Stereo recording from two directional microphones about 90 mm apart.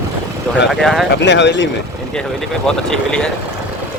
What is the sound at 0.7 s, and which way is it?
Speech, 5° left (ahead or behind).